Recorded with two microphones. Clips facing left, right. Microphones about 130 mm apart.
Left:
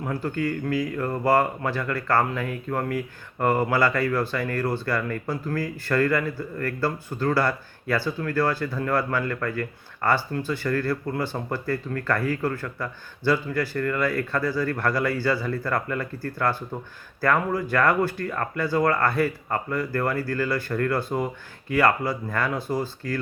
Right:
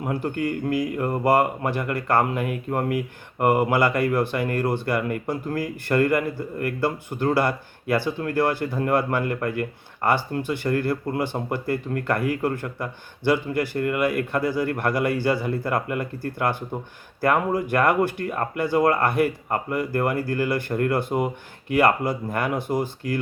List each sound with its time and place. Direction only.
0.0 s speech: 20° right (ahead or behind)